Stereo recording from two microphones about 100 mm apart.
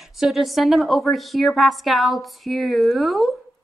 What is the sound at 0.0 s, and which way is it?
A woman's voice, centre (ahead or behind).